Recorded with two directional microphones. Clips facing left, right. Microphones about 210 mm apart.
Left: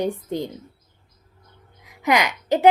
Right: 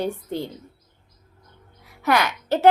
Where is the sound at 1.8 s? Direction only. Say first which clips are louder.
Left 1 dB; 15° left (ahead or behind).